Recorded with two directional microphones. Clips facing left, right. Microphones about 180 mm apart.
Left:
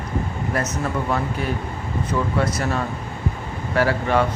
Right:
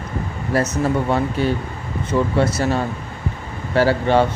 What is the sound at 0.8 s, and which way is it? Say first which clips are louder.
Speech: right 5 dB; 30° right (ahead or behind).